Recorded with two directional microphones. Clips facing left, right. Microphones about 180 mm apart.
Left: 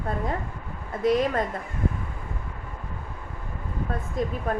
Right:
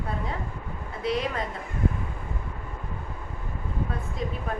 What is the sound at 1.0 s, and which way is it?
Speech, 45° left (ahead or behind).